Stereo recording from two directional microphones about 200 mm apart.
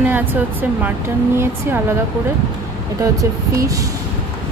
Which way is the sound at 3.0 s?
15° right (ahead or behind).